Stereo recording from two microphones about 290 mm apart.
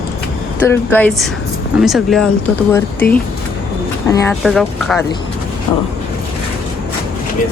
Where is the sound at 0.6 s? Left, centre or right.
Centre.